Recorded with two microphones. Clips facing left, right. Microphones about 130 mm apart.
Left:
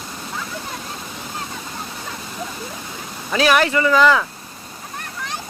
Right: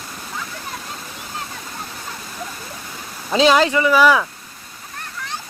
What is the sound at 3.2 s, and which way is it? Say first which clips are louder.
Speech: right 2 dB; 20° right (ahead or behind).